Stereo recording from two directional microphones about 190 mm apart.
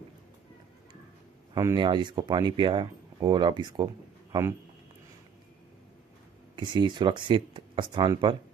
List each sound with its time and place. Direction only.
1.5 s speech: 20° right (ahead or behind)
6.5 s speech: 25° right (ahead or behind)